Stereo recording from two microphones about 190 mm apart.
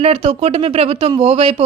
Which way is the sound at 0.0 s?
30° right (ahead or behind).